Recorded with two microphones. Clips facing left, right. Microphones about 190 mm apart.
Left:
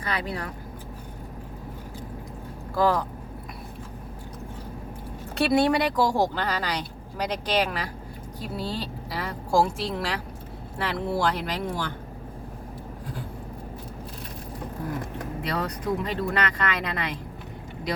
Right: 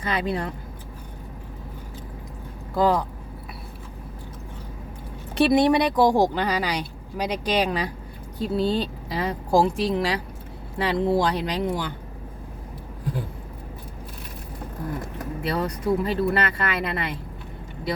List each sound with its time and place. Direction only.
0.0 s a woman's voice: 25° right (ahead or behind)
2.7 s a woman's voice: 15° right (ahead or behind)
5.5 s a woman's voice: 20° right (ahead or behind)
15.4 s speech: centre (ahead or behind)